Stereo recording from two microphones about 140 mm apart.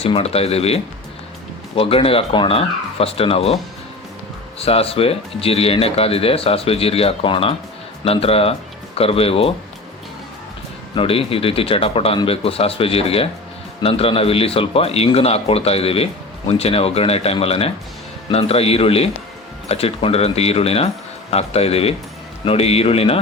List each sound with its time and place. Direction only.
0.0 s speech: 45° left (ahead or behind)
4.6 s speech: 45° left (ahead or behind)
10.9 s speech: 40° left (ahead or behind)